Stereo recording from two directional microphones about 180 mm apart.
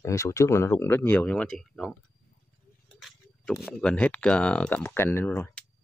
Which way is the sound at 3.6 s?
5° left (ahead or behind).